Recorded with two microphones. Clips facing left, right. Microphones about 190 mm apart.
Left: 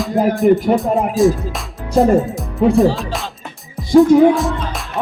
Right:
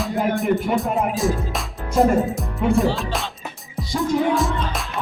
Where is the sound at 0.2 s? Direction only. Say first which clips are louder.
Left 7 dB; 35° left (ahead or behind).